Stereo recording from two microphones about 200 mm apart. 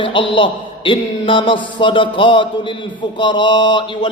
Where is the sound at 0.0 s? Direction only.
25° left (ahead or behind).